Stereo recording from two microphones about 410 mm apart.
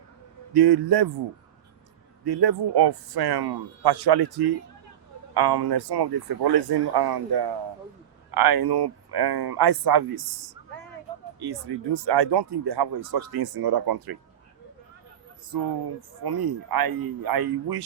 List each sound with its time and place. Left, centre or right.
0.5 s a man's voice: right
2.2 s speech: right
16.2 s speech: right